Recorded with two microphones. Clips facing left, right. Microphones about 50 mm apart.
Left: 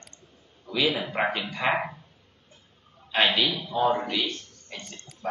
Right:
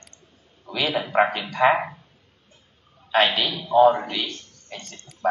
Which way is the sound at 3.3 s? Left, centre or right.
Centre.